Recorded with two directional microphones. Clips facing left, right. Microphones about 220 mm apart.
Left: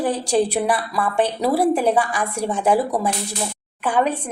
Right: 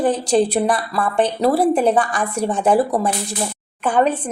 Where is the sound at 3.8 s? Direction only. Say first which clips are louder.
Right 3 dB; 10° left (ahead or behind).